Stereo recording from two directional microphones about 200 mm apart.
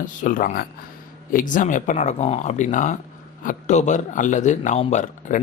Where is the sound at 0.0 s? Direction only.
40° left (ahead or behind).